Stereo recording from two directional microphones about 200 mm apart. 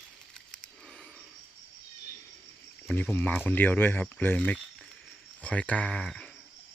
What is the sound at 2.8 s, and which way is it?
Speech, 5° left (ahead or behind).